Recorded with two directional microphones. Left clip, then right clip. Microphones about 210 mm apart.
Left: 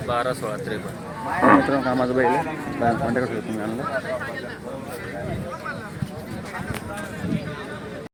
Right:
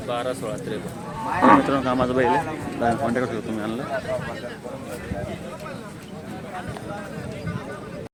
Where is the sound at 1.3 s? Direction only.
50° right (ahead or behind).